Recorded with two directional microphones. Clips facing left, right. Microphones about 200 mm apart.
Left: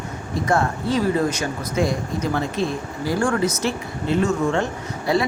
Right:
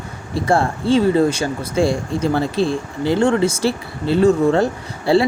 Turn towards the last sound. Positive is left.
turn(degrees=-30)  # may be behind; listen again after turning